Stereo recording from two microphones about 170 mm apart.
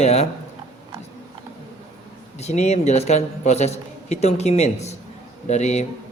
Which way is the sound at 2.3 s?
40° left (ahead or behind).